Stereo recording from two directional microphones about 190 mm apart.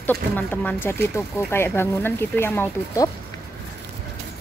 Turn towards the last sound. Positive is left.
turn(degrees=10)  # may be behind; listen again after turning